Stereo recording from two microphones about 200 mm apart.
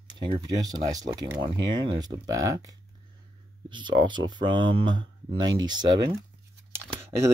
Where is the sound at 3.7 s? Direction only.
25° right (ahead or behind).